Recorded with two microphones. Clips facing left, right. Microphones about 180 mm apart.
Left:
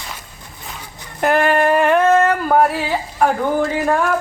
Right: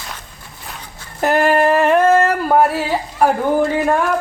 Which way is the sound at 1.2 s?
Centre (ahead or behind).